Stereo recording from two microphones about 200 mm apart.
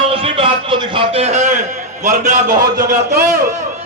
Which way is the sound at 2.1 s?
35° right (ahead or behind).